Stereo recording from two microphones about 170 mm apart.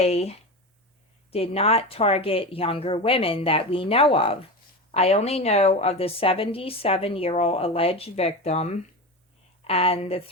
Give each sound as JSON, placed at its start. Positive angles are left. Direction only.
{"t": 0.0, "sound": "a woman's voice", "side_deg": 40}